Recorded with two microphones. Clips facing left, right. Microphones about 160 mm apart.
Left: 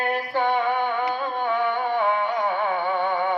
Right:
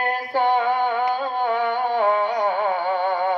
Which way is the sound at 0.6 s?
40° right (ahead or behind).